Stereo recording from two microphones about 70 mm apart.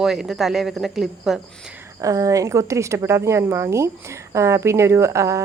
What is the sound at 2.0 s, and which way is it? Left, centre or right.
A woman's voice, right.